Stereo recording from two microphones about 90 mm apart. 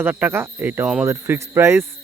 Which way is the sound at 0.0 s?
20° right (ahead or behind).